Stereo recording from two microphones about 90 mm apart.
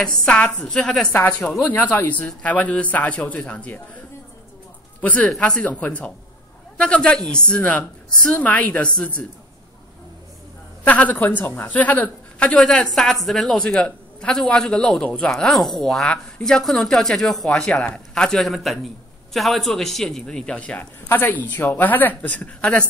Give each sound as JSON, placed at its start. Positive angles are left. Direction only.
{"t": 0.0, "sound": "a woman's voice", "side_deg": 10}
{"t": 1.1, "sound": "a woman's voice", "side_deg": 20}
{"t": 5.0, "sound": "a woman's voice", "side_deg": 15}
{"t": 10.8, "sound": "a woman's voice", "side_deg": 15}
{"t": 17.6, "sound": "a woman's voice", "side_deg": 15}